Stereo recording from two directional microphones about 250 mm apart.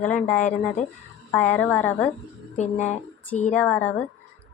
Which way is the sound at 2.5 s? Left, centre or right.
Left.